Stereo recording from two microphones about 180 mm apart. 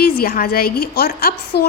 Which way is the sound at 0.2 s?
55° left (ahead or behind).